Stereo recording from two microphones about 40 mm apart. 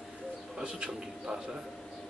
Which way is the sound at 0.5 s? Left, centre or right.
Centre.